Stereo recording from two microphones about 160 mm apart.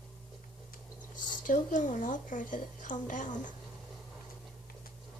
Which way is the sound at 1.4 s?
50° left (ahead or behind).